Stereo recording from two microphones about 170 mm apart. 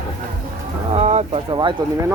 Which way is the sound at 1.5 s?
25° right (ahead or behind).